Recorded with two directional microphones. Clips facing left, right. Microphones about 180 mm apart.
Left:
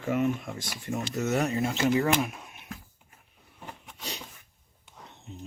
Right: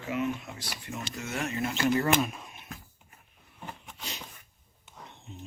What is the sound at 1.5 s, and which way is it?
Speech, 25° left (ahead or behind).